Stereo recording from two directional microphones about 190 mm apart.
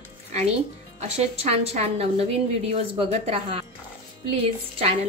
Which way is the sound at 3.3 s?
30° right (ahead or behind).